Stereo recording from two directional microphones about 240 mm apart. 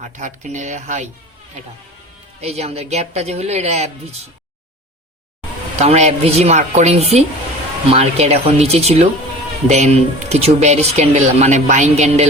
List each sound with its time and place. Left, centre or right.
0.2 s speech: right
2.4 s speech: right
5.8 s speech: right